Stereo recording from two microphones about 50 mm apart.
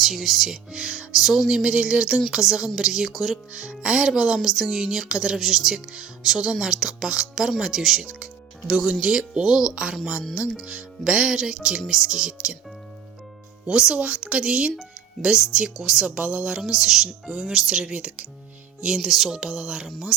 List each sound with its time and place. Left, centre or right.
0.0 s speech: centre
3.5 s speech: right
13.7 s speech: centre
16.0 s speech: right